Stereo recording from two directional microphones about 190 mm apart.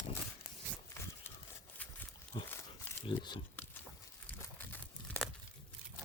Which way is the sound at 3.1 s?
25° left (ahead or behind).